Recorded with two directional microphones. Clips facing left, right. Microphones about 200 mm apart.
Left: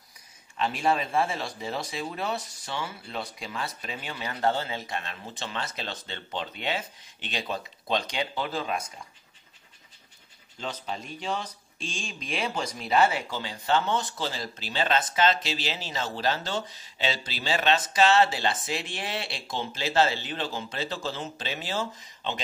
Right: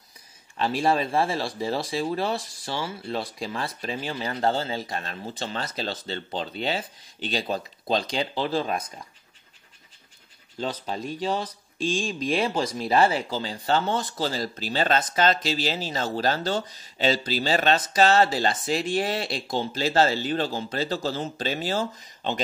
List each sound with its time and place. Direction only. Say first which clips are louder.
0.6 s speech: right 3 dB; 35° right (ahead or behind)
10.6 s speech: right 5 dB; 35° right (ahead or behind)